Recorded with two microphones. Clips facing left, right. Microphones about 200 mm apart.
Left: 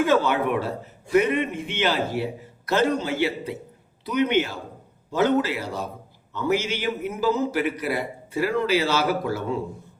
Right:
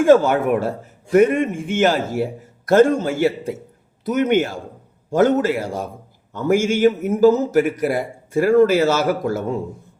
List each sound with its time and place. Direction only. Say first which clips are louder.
0.0 s a man's voice: right 7 dB; 45° right (ahead or behind)